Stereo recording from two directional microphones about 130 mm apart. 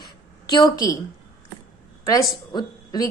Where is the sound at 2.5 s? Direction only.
35° left (ahead or behind).